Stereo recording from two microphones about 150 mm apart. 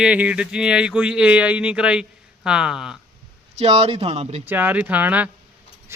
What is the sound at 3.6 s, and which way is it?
Speech, 45° right (ahead or behind).